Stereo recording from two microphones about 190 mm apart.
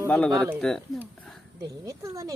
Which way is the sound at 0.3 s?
15° right (ahead or behind).